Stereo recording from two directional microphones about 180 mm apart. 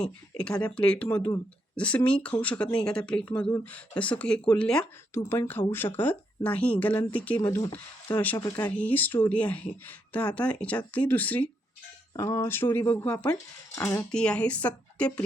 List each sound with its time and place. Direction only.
0.0 s speech: 5° left (ahead or behind)
8.4 s speech: 20° left (ahead or behind)
8.7 s speech: 10° left (ahead or behind)
14.1 s speech: 5° left (ahead or behind)